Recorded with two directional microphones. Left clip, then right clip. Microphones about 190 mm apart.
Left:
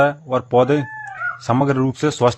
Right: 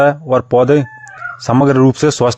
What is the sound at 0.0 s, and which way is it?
Speech, 35° right (ahead or behind).